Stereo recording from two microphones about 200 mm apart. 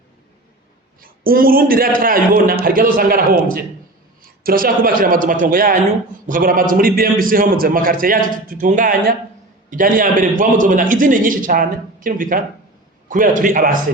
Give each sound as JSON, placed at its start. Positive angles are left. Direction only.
{"t": 1.0, "sound": "a man's voice", "side_deg": -45}